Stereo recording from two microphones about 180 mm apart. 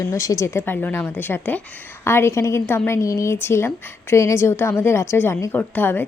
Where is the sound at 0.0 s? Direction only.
20° left (ahead or behind).